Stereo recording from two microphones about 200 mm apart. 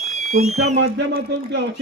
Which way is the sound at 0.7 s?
60° right (ahead or behind).